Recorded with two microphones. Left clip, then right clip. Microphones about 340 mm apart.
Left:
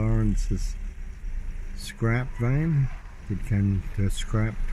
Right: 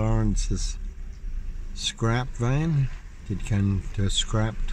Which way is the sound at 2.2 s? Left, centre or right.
Right.